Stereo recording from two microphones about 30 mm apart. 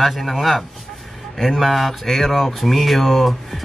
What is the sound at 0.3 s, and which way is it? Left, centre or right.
Speech, centre.